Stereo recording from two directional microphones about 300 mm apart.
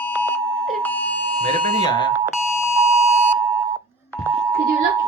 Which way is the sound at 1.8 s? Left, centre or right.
Centre.